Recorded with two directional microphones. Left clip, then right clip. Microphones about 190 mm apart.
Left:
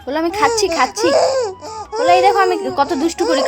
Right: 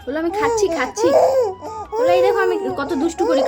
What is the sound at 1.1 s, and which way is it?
Laughter, 10° right (ahead or behind).